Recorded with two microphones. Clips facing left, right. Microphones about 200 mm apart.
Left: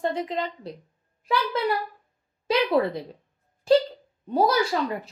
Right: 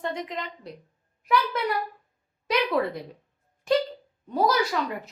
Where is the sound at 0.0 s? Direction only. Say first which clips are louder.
Left 5 dB; 30° left (ahead or behind).